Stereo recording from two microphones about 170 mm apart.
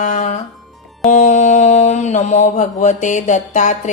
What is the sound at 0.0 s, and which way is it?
Music, 45° left (ahead or behind).